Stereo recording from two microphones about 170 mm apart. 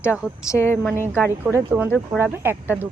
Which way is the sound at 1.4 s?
10° right (ahead or behind).